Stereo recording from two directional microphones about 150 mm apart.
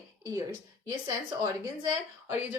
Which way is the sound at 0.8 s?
25° right (ahead or behind).